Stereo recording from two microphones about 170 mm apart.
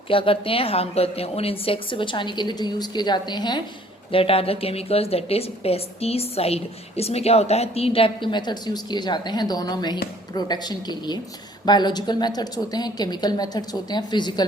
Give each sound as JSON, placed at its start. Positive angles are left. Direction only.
{"t": 0.1, "sound": "a woman's voice", "side_deg": 30}